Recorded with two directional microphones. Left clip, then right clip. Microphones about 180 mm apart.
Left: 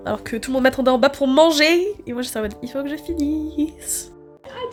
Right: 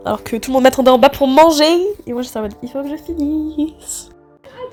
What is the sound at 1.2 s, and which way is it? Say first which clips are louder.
Speech: right 5 dB; centre (ahead or behind).